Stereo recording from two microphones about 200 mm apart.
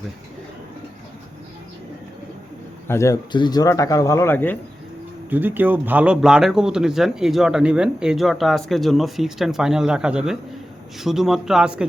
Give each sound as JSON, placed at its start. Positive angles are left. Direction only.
{"t": 2.8, "sound": "speech", "side_deg": 15}
{"t": 5.3, "sound": "speech", "side_deg": -10}